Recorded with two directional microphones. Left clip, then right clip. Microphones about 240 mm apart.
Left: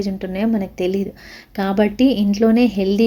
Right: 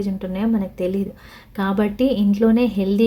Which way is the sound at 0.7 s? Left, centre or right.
Centre.